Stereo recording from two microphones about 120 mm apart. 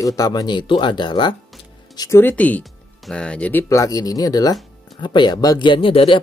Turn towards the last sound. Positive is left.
turn(degrees=45)  # may be behind; listen again after turning